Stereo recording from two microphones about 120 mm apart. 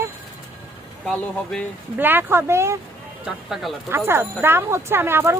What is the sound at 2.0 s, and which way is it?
Speech, 15° right (ahead or behind).